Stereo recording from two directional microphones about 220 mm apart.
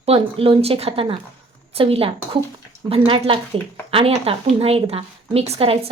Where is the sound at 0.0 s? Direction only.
25° right (ahead or behind).